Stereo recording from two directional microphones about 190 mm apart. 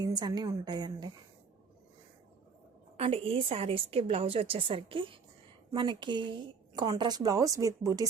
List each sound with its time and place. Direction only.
0.0 s a woman's voice: 20° right (ahead or behind)
3.0 s a woman's voice: 30° right (ahead or behind); by 8.0 s 15° right (ahead or behind)